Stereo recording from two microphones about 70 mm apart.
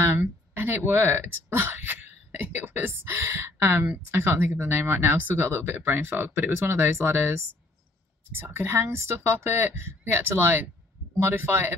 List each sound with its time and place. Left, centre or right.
0.6 s speech: right